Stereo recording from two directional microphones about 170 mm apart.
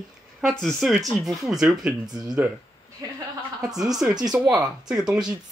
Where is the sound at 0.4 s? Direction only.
Centre (ahead or behind).